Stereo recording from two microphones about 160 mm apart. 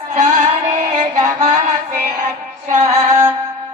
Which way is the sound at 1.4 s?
50° right (ahead or behind).